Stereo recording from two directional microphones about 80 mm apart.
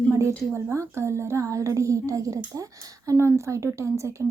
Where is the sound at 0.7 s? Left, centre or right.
Right.